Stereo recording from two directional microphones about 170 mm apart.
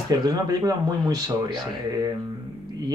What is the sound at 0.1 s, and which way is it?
Speech, 25° right (ahead or behind).